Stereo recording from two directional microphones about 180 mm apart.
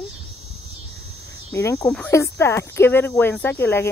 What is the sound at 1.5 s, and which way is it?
Speech, 15° left (ahead or behind).